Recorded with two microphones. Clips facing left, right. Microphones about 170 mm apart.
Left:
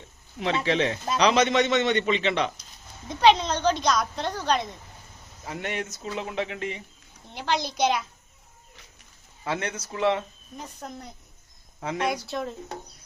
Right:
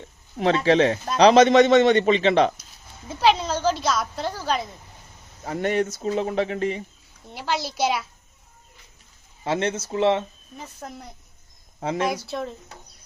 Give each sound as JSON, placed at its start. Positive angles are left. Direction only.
{"t": 0.6, "sound": "a man's voice", "side_deg": -40}
{"t": 3.1, "sound": "a woman's voice", "side_deg": -5}
{"t": 5.5, "sound": "a man's voice", "side_deg": -40}
{"t": 7.3, "sound": "a woman's voice", "side_deg": -5}
{"t": 9.4, "sound": "speech", "side_deg": -25}
{"t": 10.8, "sound": "a woman's voice", "side_deg": -5}